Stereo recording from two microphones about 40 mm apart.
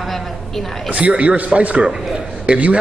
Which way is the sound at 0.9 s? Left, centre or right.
Right.